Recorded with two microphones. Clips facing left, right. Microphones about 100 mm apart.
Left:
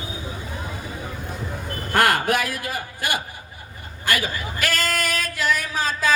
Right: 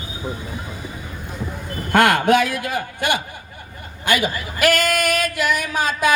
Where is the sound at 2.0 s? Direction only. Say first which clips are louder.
Right 4 dB; 20° right (ahead or behind).